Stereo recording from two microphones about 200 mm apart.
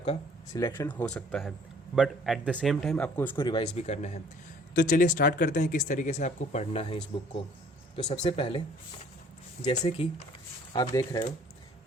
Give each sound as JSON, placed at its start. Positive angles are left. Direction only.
{"t": 0.5, "sound": "speech", "side_deg": 15}
{"t": 3.3, "sound": "speech", "side_deg": 25}